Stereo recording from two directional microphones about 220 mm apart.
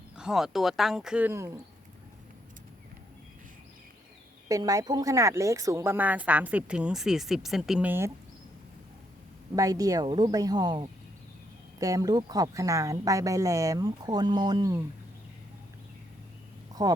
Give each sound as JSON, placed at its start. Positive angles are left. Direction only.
{"t": 0.2, "sound": "speech", "side_deg": 0}
{"t": 4.4, "sound": "speech", "side_deg": -15}
{"t": 9.6, "sound": "speech", "side_deg": -15}